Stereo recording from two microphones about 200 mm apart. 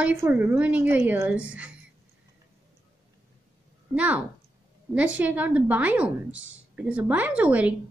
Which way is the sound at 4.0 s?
5° right (ahead or behind).